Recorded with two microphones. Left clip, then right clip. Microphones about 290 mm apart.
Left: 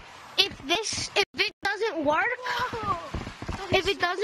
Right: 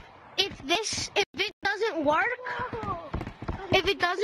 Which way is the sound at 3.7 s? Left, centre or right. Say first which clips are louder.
Even; centre.